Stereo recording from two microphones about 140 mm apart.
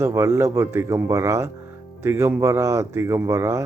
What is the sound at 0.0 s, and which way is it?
Speech, 20° right (ahead or behind).